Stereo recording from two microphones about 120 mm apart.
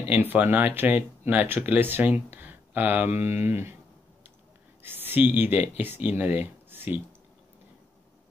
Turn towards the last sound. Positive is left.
turn(degrees=-15)  # may be behind; listen again after turning